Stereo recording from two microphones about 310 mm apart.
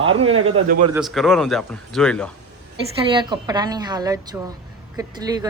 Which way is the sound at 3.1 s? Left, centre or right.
Centre.